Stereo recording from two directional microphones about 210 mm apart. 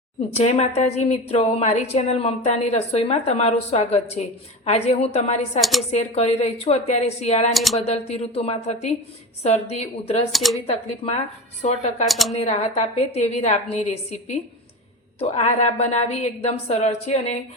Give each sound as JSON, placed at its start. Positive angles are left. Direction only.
{"t": 0.3, "sound": "a woman's voice", "side_deg": 30}
{"t": 5.5, "sound": "speech", "side_deg": 0}
{"t": 5.9, "sound": "a woman's voice", "side_deg": 30}
{"t": 7.5, "sound": "speech", "side_deg": 0}
{"t": 7.8, "sound": "speech", "side_deg": 30}
{"t": 10.3, "sound": "speech", "side_deg": 0}
{"t": 10.7, "sound": "a woman's voice", "side_deg": 30}
{"t": 12.0, "sound": "speech", "side_deg": 0}
{"t": 12.3, "sound": "a woman's voice", "side_deg": 30}